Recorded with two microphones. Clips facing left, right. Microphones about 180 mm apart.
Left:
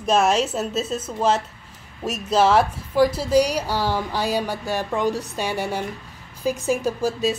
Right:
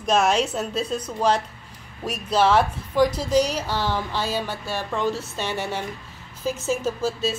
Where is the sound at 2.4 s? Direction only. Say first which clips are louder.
Left 1 dB; 10° left (ahead or behind).